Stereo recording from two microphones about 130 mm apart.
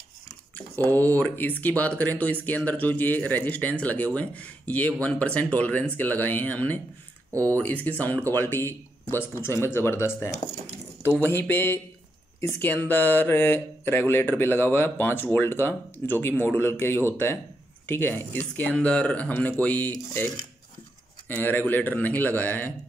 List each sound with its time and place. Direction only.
0.9 s speech: 15° left (ahead or behind)
21.3 s speech: 15° left (ahead or behind)